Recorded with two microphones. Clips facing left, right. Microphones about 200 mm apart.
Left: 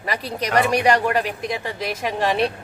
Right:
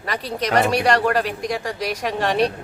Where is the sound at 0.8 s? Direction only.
10° left (ahead or behind).